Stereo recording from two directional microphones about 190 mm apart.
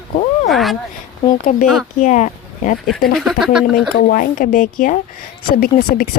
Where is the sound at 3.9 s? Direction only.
45° left (ahead or behind).